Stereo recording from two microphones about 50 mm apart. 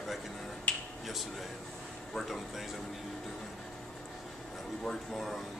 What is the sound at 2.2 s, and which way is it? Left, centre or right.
Speech, centre.